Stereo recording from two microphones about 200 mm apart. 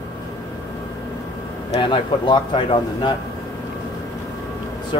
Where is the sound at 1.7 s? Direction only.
25° left (ahead or behind).